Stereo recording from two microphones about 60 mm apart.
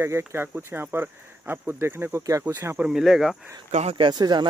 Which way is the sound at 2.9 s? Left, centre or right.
Centre.